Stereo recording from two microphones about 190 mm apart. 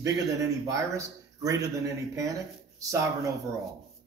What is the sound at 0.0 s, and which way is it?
Speech, 15° right (ahead or behind).